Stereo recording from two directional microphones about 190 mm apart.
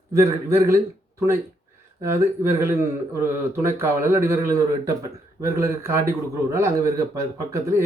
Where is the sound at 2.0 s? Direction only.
15° right (ahead or behind).